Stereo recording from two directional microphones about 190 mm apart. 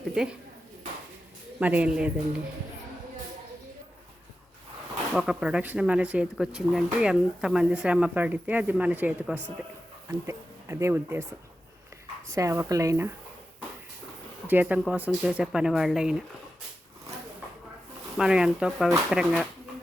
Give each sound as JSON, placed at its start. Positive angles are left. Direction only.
{"t": 0.1, "sound": "speech", "side_deg": -5}
{"t": 1.5, "sound": "speech", "side_deg": -10}
{"t": 5.1, "sound": "speech", "side_deg": -5}
{"t": 12.3, "sound": "speech", "side_deg": -15}
{"t": 14.4, "sound": "speech", "side_deg": -10}
{"t": 18.2, "sound": "speech", "side_deg": -5}